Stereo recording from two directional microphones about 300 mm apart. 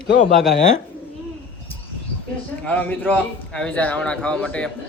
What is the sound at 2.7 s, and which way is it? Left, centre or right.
A man's voice, centre.